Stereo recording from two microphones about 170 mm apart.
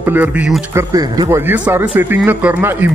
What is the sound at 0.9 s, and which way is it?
Speech, 20° right (ahead or behind).